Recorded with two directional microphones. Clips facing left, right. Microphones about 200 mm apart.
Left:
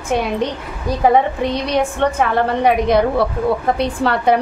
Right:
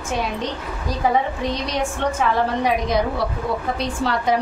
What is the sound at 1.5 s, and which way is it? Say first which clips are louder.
A woman's voice: left 5 dB; 60° left (ahead or behind).